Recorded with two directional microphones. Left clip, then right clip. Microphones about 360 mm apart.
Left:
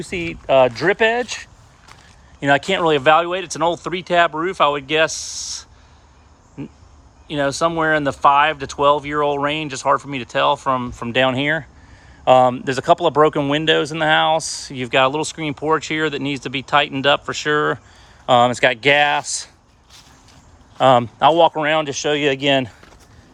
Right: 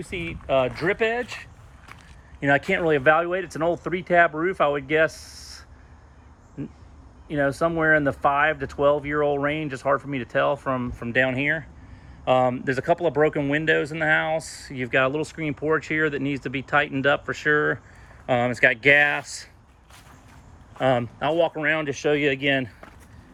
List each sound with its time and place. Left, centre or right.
0.0 s speech: centre
2.4 s speech: centre
7.3 s speech: centre
20.7 s speech: centre